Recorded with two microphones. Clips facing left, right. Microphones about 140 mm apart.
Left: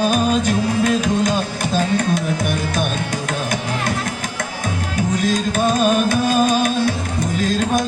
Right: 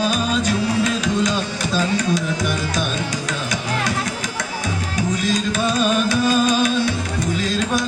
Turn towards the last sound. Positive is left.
turn(degrees=50)  # may be behind; listen again after turning